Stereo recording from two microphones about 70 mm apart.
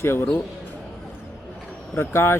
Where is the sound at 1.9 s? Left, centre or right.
Left.